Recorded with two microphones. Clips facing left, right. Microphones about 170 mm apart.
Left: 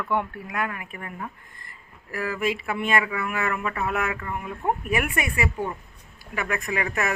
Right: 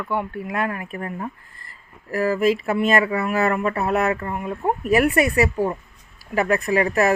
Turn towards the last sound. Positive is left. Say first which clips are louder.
# right 8 dB
turn(degrees=-35)  # may be behind; listen again after turning